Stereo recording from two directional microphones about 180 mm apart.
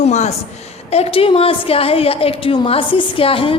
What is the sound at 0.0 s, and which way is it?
A woman's voice, 35° left (ahead or behind).